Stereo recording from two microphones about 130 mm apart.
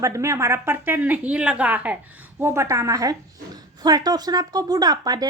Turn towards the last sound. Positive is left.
turn(degrees=-30)  # may be behind; listen again after turning